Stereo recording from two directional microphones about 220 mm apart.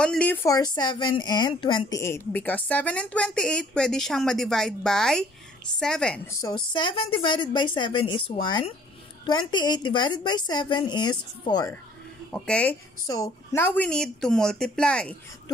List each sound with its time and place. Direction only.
0.0 s a woman's voice: 5° left (ahead or behind)
6.4 s a woman's voice: 20° left (ahead or behind)
12.3 s a woman's voice: 5° left (ahead or behind)
13.0 s a woman's voice: 15° left (ahead or behind)